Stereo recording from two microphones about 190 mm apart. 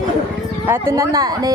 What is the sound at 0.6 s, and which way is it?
Speech, 15° right (ahead or behind).